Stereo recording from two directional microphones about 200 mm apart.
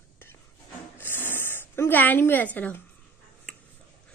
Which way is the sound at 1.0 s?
10° left (ahead or behind).